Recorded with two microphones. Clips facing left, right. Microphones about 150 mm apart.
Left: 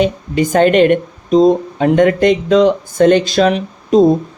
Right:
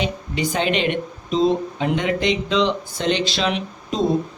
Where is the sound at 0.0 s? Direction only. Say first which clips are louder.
Left 9 dB; 50° left (ahead or behind).